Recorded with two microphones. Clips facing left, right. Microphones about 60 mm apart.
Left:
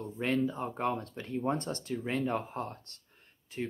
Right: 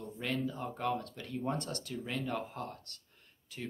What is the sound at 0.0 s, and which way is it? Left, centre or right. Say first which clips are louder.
Speech: left 6 dB; left.